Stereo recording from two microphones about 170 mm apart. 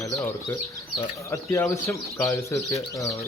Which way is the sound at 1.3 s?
15° left (ahead or behind).